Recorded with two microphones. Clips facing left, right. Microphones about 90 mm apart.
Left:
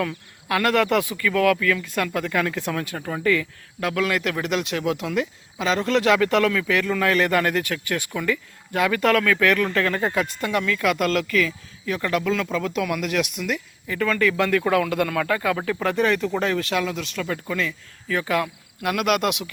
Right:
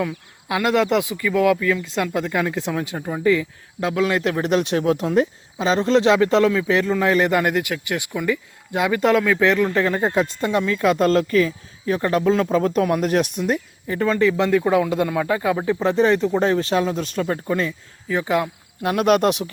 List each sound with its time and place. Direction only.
0.0 s speech: 15° right (ahead or behind); by 19.5 s 35° right (ahead or behind)